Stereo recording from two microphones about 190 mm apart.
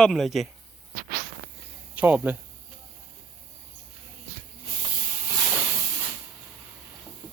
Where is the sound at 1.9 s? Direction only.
10° right (ahead or behind).